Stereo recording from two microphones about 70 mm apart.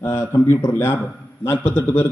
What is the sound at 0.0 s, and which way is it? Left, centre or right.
A man's voice, left.